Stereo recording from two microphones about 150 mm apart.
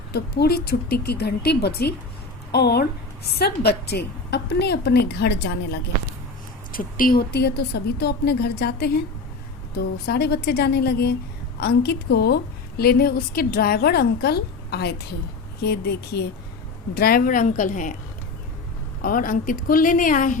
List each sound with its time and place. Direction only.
0.1 s a woman's voice: 90° left
6.7 s a woman's voice: 70° left (ahead or behind)
19.0 s a woman's voice: 70° left (ahead or behind)